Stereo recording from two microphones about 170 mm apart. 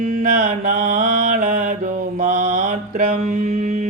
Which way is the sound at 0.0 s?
50° right (ahead or behind).